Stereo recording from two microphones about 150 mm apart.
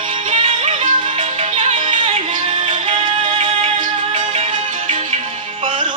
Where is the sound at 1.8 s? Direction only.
35° right (ahead or behind).